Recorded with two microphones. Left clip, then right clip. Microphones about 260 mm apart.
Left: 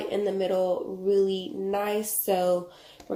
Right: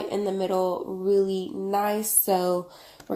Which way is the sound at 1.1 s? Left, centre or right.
Right.